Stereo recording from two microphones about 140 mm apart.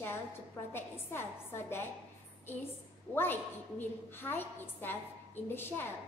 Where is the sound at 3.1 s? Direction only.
15° left (ahead or behind).